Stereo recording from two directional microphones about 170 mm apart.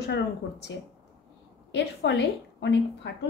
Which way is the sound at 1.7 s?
85° left.